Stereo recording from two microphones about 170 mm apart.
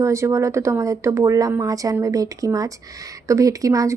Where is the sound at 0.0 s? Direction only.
15° right (ahead or behind).